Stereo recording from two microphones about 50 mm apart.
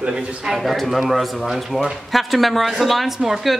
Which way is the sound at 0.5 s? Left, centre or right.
Centre.